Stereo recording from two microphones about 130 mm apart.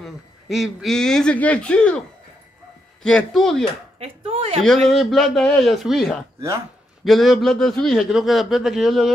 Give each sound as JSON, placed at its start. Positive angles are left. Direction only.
{"t": 0.0, "sound": "speech", "side_deg": 0}
{"t": 3.0, "sound": "a man's voice", "side_deg": 5}
{"t": 4.0, "sound": "speech", "side_deg": -50}
{"t": 4.8, "sound": "a man's voice", "side_deg": 0}